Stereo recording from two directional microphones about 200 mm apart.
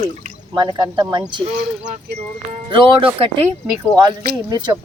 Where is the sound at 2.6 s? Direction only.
25° right (ahead or behind).